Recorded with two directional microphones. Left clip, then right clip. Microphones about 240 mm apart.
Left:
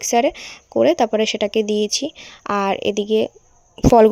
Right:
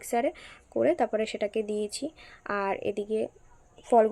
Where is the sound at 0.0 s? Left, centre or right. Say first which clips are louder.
Left 11 dB; left.